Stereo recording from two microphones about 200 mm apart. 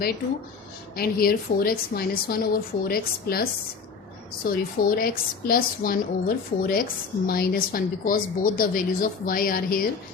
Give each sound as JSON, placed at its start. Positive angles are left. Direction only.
{"t": 0.9, "sound": "a woman's voice", "side_deg": 50}
{"t": 4.5, "sound": "a woman's voice", "side_deg": 50}